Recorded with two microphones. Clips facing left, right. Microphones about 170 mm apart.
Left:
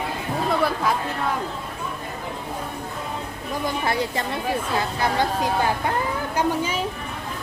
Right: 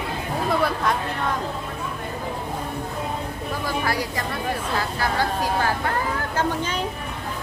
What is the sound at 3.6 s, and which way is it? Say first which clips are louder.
Speech: left 2 dB; 25° left (ahead or behind).